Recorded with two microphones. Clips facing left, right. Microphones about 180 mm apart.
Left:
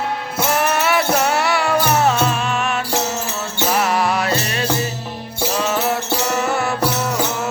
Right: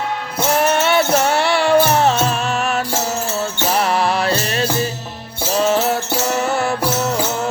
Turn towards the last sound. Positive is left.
turn(degrees=-35)  # may be behind; listen again after turning